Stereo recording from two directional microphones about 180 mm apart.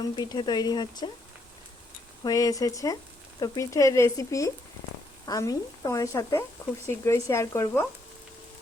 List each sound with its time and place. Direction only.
0.0 s speech: 25° left (ahead or behind)
2.2 s a woman's voice: 20° left (ahead or behind)